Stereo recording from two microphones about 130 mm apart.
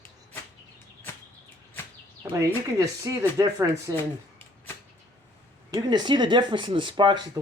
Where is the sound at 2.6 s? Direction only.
25° right (ahead or behind).